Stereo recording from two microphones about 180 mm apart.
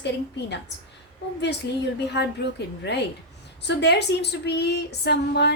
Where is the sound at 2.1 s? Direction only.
70° left (ahead or behind).